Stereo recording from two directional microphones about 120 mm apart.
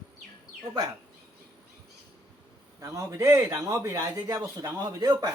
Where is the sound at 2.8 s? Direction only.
25° right (ahead or behind).